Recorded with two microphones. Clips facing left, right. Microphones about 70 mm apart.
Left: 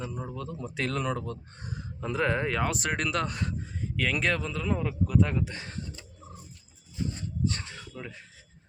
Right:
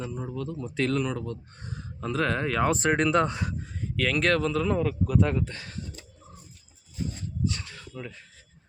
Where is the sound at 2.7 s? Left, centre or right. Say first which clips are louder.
Right 7 dB; right.